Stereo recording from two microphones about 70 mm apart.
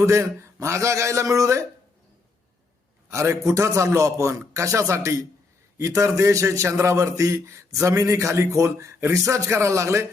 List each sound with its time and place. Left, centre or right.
0.0 s a man's voice: right
3.1 s a man's voice: right